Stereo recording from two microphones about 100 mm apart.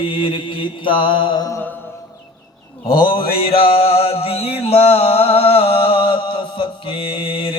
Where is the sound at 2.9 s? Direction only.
60° left (ahead or behind).